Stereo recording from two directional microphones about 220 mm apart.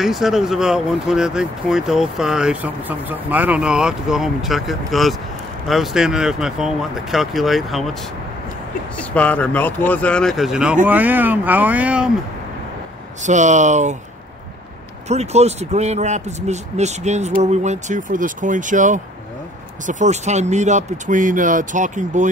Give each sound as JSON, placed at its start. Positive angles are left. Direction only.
{"t": 0.0, "sound": "speech", "side_deg": 0}
{"t": 8.9, "sound": "speech", "side_deg": 5}
{"t": 13.2, "sound": "speech", "side_deg": -35}
{"t": 15.0, "sound": "speech", "side_deg": -30}